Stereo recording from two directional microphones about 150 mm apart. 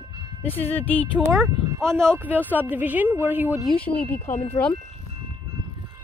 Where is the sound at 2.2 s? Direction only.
10° right (ahead or behind).